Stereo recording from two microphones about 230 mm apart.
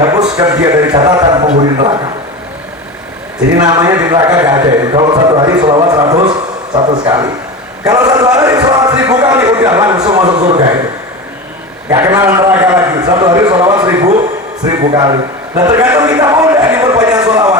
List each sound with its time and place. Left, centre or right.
0.3 s a man's voice: centre
3.6 s a man's voice: centre
11.9 s a man's voice: centre
15.7 s a sound: centre